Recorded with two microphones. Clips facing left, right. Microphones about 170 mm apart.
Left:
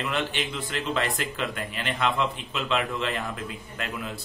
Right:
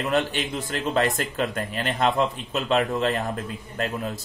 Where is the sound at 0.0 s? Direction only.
45° right (ahead or behind).